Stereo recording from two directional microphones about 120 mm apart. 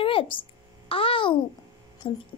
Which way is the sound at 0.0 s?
50° left (ahead or behind).